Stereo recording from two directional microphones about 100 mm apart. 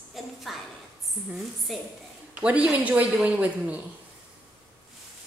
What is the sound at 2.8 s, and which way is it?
Speech, 15° right (ahead or behind).